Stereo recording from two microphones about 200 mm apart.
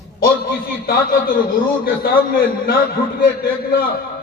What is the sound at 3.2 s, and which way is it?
Speech, 50° left (ahead or behind).